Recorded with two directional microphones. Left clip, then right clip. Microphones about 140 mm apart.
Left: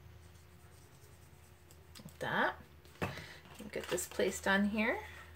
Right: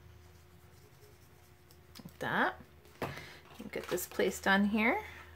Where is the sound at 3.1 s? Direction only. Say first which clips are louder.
Right 1 dB; 25° right (ahead or behind).